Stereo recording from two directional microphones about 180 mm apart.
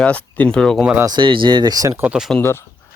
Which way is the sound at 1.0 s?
25° right (ahead or behind).